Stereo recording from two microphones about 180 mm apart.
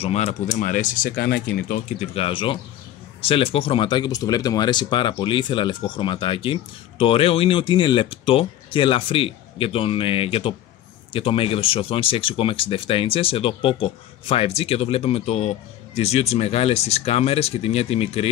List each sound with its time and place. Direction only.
0.0 s speech: 35° left (ahead or behind); by 1.8 s 55° left (ahead or behind)
2.0 s a man's voice: 30° left (ahead or behind)